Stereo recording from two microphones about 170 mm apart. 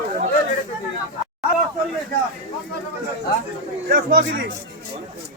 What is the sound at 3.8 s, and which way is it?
Speech, 55° right (ahead or behind).